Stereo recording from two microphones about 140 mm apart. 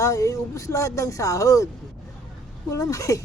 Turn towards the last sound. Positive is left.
turn(degrees=20)  # may be behind; listen again after turning